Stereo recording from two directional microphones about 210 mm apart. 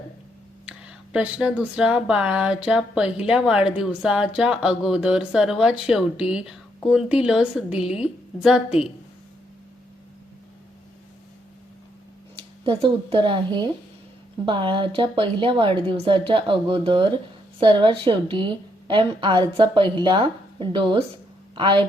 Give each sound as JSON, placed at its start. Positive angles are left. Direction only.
{"t": 0.6, "sound": "speech", "side_deg": -5}
{"t": 12.4, "sound": "a woman's voice", "side_deg": -25}